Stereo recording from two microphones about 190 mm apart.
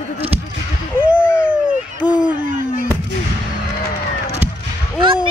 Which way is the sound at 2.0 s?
5° right (ahead or behind).